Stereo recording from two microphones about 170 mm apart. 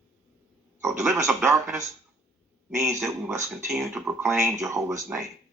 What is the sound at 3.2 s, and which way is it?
Speech, 15° right (ahead or behind).